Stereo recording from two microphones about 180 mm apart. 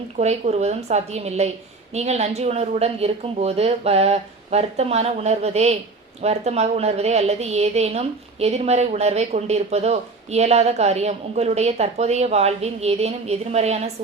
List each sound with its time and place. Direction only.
0.2 s a woman's voice: 40° right (ahead or behind)